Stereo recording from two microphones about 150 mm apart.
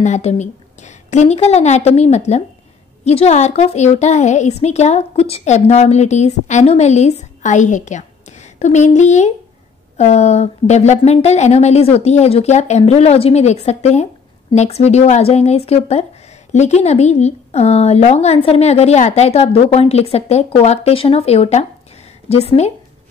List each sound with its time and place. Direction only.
0.0 s speech: 50° left (ahead or behind)